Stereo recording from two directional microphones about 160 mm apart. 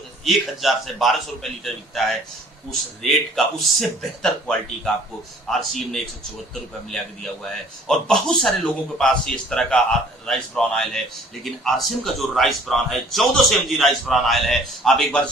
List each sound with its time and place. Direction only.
0.3 s speech: centre (ahead or behind)